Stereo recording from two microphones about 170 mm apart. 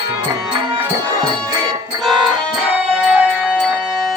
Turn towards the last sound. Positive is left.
turn(degrees=-5)  # may be behind; listen again after turning